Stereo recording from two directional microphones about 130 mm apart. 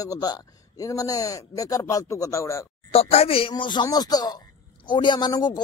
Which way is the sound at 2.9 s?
50° left (ahead or behind).